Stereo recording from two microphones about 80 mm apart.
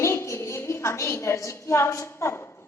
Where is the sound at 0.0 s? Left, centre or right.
Left.